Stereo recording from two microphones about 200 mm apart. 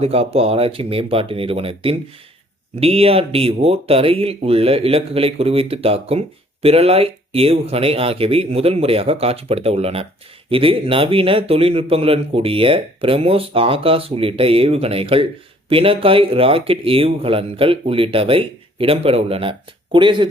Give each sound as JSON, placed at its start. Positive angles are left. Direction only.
{"t": 0.0, "sound": "speech", "side_deg": -30}